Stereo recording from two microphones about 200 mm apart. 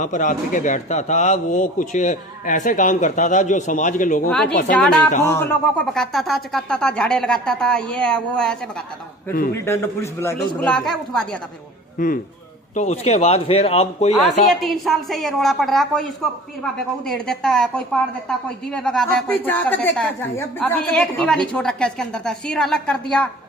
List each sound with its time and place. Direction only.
0.0 s a man's voice: 40° left (ahead or behind)
4.7 s a woman's voice: 5° left (ahead or behind)
9.6 s a man's voice: 15° left (ahead or behind)
11.9 s a man's voice: 45° left (ahead or behind)
14.6 s a woman's voice: centre (ahead or behind)